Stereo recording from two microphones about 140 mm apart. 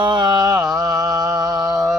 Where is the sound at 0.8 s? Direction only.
25° right (ahead or behind).